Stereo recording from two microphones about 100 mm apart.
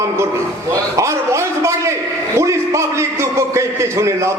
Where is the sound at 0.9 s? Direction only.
30° right (ahead or behind).